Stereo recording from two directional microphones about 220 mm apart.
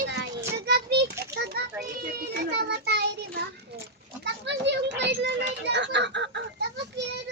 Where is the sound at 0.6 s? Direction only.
45° right (ahead or behind).